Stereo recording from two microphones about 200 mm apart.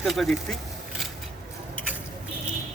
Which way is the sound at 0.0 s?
Centre (ahead or behind).